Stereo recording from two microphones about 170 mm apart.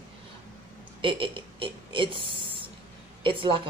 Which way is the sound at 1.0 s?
30° right (ahead or behind).